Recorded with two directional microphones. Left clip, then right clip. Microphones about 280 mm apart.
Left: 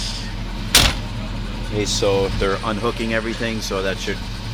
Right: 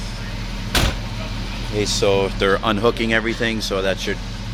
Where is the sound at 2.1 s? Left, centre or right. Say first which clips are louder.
Right 2 dB; right.